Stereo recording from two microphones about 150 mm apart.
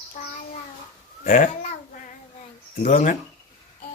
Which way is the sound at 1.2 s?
60° left (ahead or behind).